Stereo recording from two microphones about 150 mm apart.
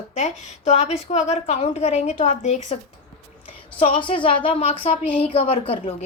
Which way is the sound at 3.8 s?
35° left (ahead or behind).